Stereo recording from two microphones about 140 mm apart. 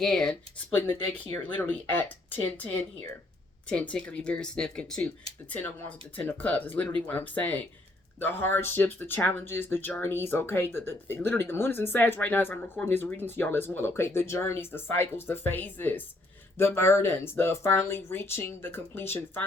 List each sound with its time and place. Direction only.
0.0 s speech: 5° left (ahead or behind)
6.1 s speech: 10° left (ahead or behind)